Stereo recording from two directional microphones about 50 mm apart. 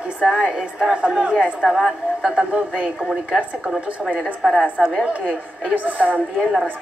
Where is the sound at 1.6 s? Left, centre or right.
Centre.